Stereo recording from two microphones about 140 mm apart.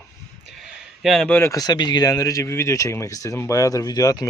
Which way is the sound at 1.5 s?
30° left (ahead or behind).